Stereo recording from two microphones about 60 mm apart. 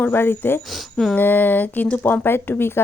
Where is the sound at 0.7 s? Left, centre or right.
Centre.